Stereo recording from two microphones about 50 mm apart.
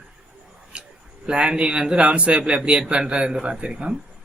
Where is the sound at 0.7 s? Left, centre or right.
Right.